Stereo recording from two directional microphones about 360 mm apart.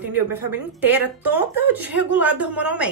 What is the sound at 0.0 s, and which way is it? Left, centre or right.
A woman's voice, centre.